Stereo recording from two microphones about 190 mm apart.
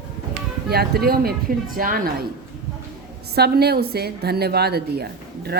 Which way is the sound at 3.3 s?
55° right (ahead or behind).